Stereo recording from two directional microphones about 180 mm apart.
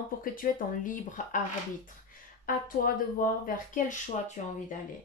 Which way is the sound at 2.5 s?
50° left (ahead or behind).